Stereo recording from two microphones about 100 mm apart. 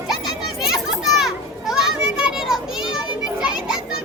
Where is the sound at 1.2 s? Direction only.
5° right (ahead or behind).